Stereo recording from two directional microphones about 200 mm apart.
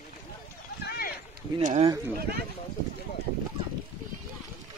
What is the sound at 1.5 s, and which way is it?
Speech, 30° right (ahead or behind).